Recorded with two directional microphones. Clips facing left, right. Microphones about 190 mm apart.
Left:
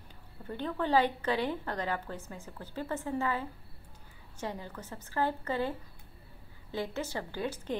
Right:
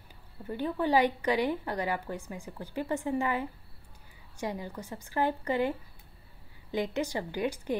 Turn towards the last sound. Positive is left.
turn(degrees=-15)  # may be behind; listen again after turning